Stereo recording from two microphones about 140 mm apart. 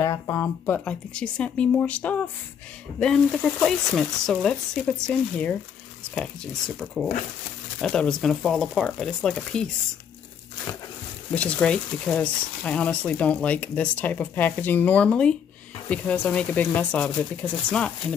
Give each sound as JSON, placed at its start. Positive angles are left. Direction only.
{"t": 0.0, "sound": "speech", "side_deg": 20}
{"t": 0.7, "sound": "speech", "side_deg": 5}
{"t": 11.3, "sound": "speech", "side_deg": 10}